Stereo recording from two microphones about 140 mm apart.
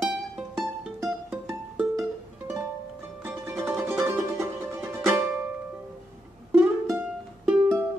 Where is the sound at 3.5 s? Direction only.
5° right (ahead or behind).